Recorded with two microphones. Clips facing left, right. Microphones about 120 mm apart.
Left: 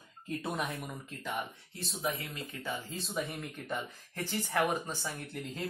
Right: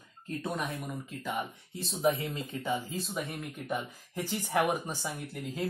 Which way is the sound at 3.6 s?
15° right (ahead or behind).